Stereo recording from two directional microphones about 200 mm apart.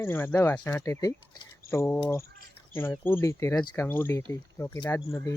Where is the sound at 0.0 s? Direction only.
10° left (ahead or behind).